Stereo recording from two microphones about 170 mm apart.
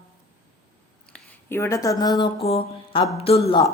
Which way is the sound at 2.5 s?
35° left (ahead or behind).